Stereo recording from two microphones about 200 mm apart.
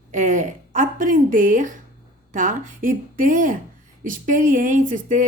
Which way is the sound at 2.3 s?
40° right (ahead or behind).